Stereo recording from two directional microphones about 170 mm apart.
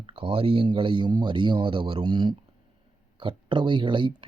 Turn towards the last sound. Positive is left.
turn(degrees=-30)  # may be behind; listen again after turning